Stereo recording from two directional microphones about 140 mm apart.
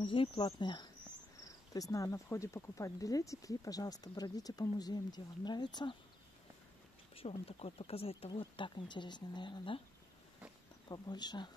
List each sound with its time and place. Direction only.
0.0 s speech: 40° left (ahead or behind)
7.2 s speech: 45° left (ahead or behind)
10.9 s speech: 30° left (ahead or behind)